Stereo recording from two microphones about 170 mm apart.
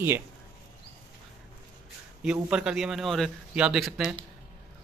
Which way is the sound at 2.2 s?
5° right (ahead or behind).